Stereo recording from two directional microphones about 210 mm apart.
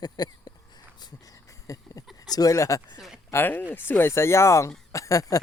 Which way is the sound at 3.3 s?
10° left (ahead or behind).